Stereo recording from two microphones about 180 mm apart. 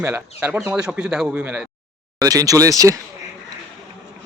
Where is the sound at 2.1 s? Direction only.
20° right (ahead or behind).